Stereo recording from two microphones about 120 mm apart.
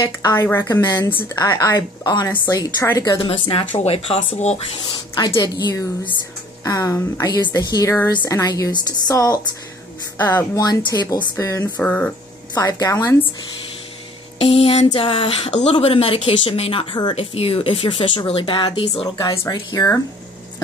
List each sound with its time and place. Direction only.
0.3 s a woman's voice: 20° left (ahead or behind)
1.3 s a woman's voice: 30° left (ahead or behind)
3.3 s speech: 50° left (ahead or behind)
4.9 s a woman's voice: 35° left (ahead or behind)
8.1 s a woman's voice: 35° left (ahead or behind)
10.6 s speech: 35° left (ahead or behind)
11.8 s speech: 10° left (ahead or behind)
12.5 s a woman's voice: 30° left (ahead or behind)
14.4 s speech: 60° left (ahead or behind); by 19.1 s 40° left (ahead or behind)
19.1 s a woman's voice: 30° left (ahead or behind)